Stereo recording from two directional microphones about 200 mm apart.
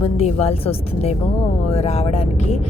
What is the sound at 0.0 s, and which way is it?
Speech, 30° left (ahead or behind).